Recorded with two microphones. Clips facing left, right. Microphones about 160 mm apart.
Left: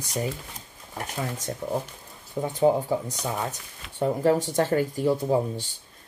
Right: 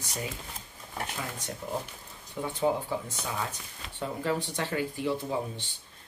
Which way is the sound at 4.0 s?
45° left (ahead or behind).